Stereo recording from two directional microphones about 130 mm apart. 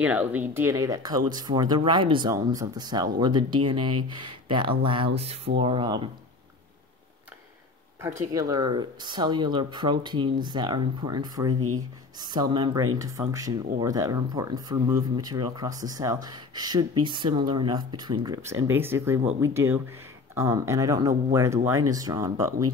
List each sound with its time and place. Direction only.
0.0 s speech: 10° right (ahead or behind); by 6.0 s 40° right (ahead or behind)
8.0 s speech: 25° right (ahead or behind)
18.4 s speech: 20° right (ahead or behind)